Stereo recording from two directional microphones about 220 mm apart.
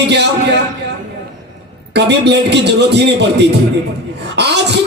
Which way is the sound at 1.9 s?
50° right (ahead or behind).